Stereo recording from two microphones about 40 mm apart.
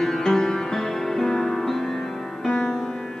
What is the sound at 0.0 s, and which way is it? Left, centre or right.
Music, centre.